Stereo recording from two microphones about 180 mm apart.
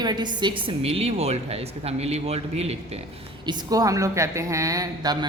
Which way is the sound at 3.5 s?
20° right (ahead or behind).